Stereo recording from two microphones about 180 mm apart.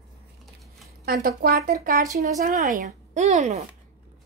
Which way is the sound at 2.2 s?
45° right (ahead or behind).